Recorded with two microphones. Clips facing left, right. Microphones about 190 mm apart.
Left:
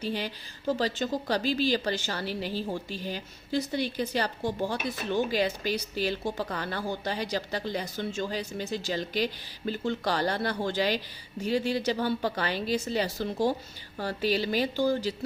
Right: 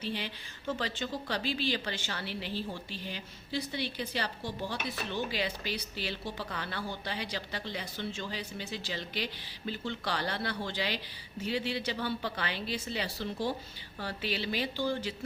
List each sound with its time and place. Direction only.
0.0 s a woman's voice: 40° left (ahead or behind)